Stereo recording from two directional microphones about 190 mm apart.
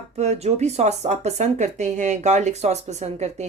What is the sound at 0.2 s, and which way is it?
Speech, 35° right (ahead or behind).